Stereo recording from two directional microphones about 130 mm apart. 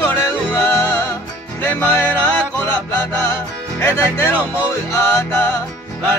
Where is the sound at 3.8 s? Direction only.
20° left (ahead or behind).